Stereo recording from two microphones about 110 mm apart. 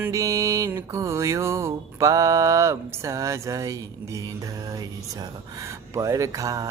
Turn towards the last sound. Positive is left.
turn(degrees=-30)  # may be behind; listen again after turning